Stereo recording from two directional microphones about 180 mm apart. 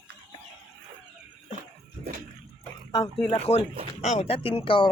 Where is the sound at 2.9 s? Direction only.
20° left (ahead or behind).